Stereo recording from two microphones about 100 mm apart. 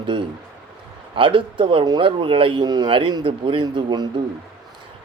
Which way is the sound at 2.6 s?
45° right (ahead or behind).